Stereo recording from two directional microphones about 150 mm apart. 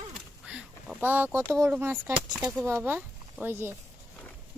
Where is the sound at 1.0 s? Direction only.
15° right (ahead or behind).